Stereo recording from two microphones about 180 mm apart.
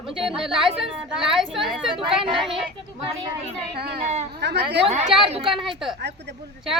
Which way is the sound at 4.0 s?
40° right (ahead or behind).